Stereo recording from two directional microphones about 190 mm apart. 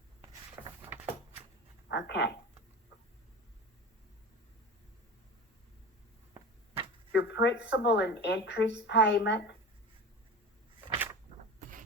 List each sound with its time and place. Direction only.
1.9 s speech: 65° left (ahead or behind)
7.1 s speech: 65° left (ahead or behind)
10.9 s a sound: 10° right (ahead or behind)